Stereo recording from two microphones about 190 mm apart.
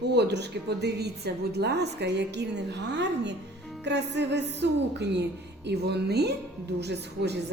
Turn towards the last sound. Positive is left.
turn(degrees=-60)  # may be behind; listen again after turning